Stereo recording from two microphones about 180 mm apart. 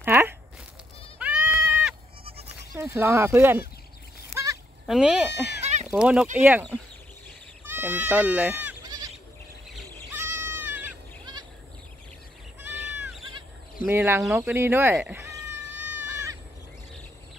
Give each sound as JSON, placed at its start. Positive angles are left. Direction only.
{"t": 0.0, "sound": "bleat", "side_deg": -10}
{"t": 1.2, "sound": "goat", "side_deg": -5}
{"t": 2.7, "sound": "speech", "side_deg": -15}
{"t": 4.3, "sound": "a sound", "side_deg": -15}
{"t": 4.8, "sound": "speech", "side_deg": 0}
{"t": 5.6, "sound": "sheep", "side_deg": -35}
{"t": 5.9, "sound": "speech", "side_deg": -5}
{"t": 7.6, "sound": "speech", "side_deg": -10}
{"t": 8.8, "sound": "goat", "side_deg": -20}
{"t": 10.1, "sound": "goat", "side_deg": -15}
{"t": 13.8, "sound": "speech", "side_deg": -15}
{"t": 14.3, "sound": "cat", "side_deg": -10}